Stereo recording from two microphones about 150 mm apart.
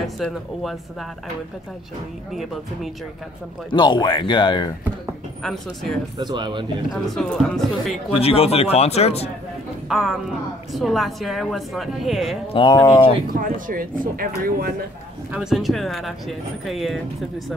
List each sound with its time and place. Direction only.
0.2 s a woman's voice: centre (ahead or behind)
2.3 s a woman's voice: centre (ahead or behind)
3.7 s speech: 30° left (ahead or behind)
5.4 s a woman's voice: centre (ahead or behind)
6.1 s speech: 30° right (ahead or behind)
6.9 s a woman's voice: centre (ahead or behind)
8.2 s speech: 40° left (ahead or behind)
9.8 s a woman's voice: centre (ahead or behind)
12.5 s speech: 25° left (ahead or behind)
13.3 s speech: 70° right (ahead or behind)
15.3 s a woman's voice: 5° right (ahead or behind)